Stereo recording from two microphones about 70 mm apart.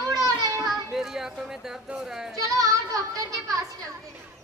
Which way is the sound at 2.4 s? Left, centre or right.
Right.